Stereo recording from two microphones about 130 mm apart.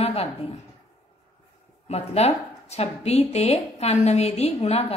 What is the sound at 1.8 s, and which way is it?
Speech, 55° left (ahead or behind).